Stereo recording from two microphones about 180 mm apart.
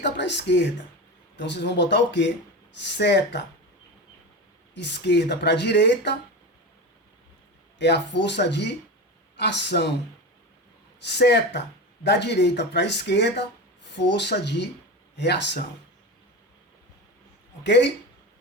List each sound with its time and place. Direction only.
0.0 s speech: 75° left (ahead or behind)
4.7 s speech: 75° left (ahead or behind)
7.8 s speech: 70° left (ahead or behind)
11.0 s speech: 70° left (ahead or behind)
17.6 s speech: 75° left (ahead or behind)